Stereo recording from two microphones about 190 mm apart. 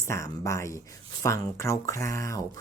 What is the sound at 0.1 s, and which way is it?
Speech, 15° left (ahead or behind).